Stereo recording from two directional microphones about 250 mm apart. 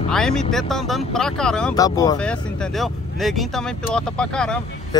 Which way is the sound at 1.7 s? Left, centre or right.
Centre.